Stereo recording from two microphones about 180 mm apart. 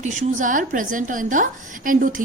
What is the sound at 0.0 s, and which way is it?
A woman's voice, 45° right (ahead or behind).